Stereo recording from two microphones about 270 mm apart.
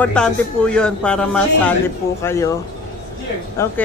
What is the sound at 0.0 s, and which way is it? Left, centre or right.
A man's voice, centre.